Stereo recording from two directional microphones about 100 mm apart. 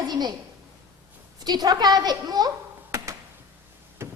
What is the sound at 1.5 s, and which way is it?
A woman's voice, 45° right (ahead or behind).